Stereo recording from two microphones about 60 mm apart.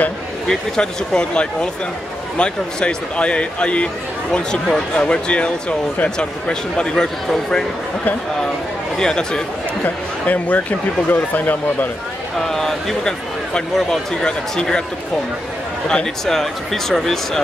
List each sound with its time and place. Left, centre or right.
0.5 s speech: centre
8.9 s speech: centre
9.8 s speech: left
12.4 s speech: centre
15.9 s speech: centre